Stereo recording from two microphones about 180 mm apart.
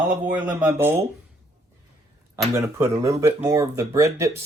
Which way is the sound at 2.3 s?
15° right (ahead or behind).